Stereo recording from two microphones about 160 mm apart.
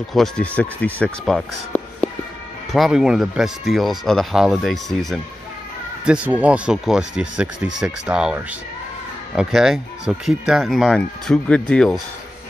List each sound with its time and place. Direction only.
0.1 s speech: 5° left (ahead or behind)